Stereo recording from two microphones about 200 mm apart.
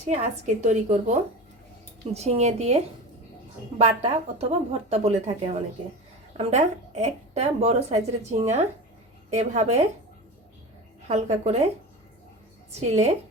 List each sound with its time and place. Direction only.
0.1 s a woman's voice: 35° right (ahead or behind)
11.1 s a woman's voice: 35° right (ahead or behind)
12.9 s a woman's voice: 35° right (ahead or behind)